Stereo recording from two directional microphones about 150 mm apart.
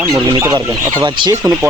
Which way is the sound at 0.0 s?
20° right (ahead or behind).